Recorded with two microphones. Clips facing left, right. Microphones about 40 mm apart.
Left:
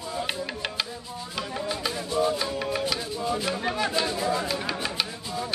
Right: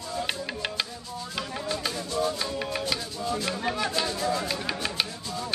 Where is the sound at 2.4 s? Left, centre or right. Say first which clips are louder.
Left 2 dB; centre.